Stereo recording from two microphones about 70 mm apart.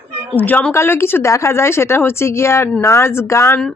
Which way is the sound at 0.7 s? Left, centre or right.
Left.